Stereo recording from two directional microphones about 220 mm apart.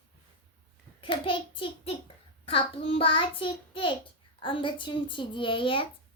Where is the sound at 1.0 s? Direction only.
25° left (ahead or behind).